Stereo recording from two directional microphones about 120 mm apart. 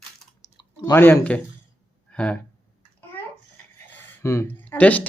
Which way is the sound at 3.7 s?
25° left (ahead or behind).